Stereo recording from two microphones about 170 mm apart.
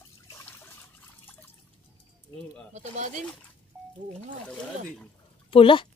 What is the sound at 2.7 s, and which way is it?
Speech, 45° right (ahead or behind).